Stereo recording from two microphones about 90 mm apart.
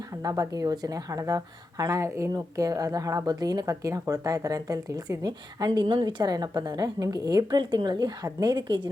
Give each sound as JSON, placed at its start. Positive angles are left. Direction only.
{"t": 0.2, "sound": "a woman's voice", "side_deg": -40}